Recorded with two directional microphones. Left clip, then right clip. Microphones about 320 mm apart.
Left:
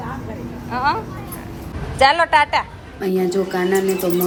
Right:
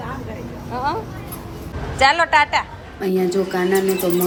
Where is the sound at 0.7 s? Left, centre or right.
Centre.